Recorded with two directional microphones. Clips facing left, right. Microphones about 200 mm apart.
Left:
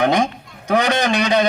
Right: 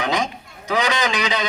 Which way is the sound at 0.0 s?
55° left (ahead or behind).